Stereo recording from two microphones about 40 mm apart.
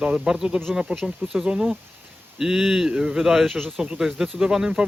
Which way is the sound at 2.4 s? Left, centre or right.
Centre.